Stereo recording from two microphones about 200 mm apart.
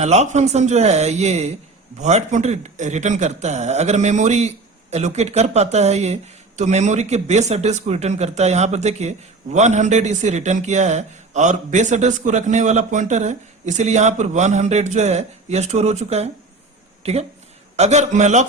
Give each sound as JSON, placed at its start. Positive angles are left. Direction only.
{"t": 0.0, "sound": "speech", "side_deg": -35}